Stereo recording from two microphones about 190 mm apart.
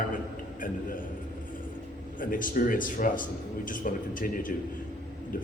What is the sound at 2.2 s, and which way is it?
A man's voice, 45° left (ahead or behind).